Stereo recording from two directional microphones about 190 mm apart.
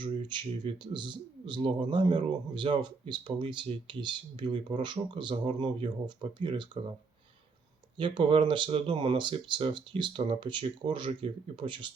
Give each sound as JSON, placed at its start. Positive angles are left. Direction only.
{"t": 0.0, "sound": "speech", "side_deg": -25}
{"t": 7.9, "sound": "speech", "side_deg": -25}